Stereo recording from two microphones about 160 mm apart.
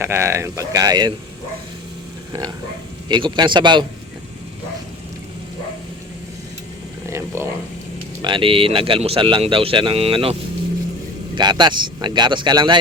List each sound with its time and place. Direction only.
0.0 s speech: 15° right (ahead or behind)
3.1 s speech: 30° right (ahead or behind)
7.1 s speech: 15° right (ahead or behind)
8.2 s speech: 30° right (ahead or behind)
11.3 s speech: 25° right (ahead or behind)